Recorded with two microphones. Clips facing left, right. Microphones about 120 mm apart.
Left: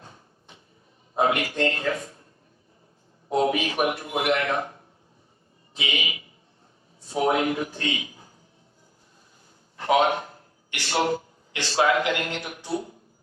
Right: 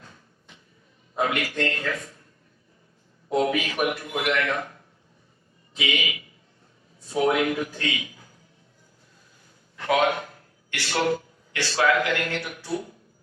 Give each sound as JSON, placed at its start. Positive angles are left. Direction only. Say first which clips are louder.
{"t": 0.0, "sound": "train", "louder": "left 2 dB", "side_deg": 30}
{"t": 1.1, "sound": "a man's voice", "louder": "left 3 dB", "side_deg": 25}
{"t": 3.2, "sound": "a man's voice", "louder": "left 1 dB", "side_deg": 25}
{"t": 9.7, "sound": "a man's voice", "louder": "left 1 dB", "side_deg": 25}